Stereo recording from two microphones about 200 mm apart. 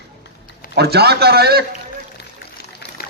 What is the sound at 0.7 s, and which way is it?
Speech, 55° right (ahead or behind).